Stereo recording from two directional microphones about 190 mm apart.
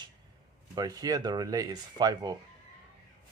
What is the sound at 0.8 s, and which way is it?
Speech, 20° right (ahead or behind).